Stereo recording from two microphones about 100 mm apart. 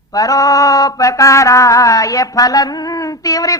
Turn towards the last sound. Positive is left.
turn(degrees=35)  # may be behind; listen again after turning